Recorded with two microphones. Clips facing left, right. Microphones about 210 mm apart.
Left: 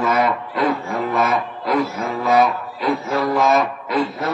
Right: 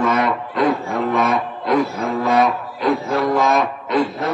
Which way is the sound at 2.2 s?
Centre (ahead or behind).